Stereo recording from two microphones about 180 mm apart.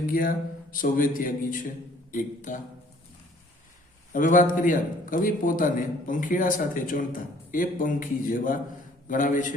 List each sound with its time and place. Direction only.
0.1 s a man's voice: 50° left (ahead or behind)
4.1 s a man's voice: 45° left (ahead or behind)